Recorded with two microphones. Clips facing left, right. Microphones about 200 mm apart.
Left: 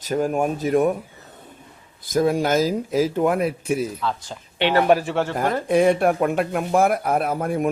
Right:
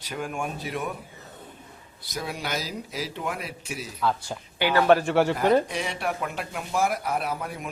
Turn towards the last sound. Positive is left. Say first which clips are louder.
# left 8 dB
turn(degrees=50)  # may be behind; listen again after turning